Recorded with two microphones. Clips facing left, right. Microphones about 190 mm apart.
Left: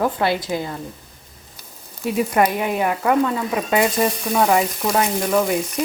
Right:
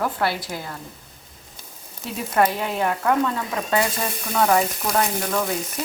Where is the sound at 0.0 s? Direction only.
20° left (ahead or behind).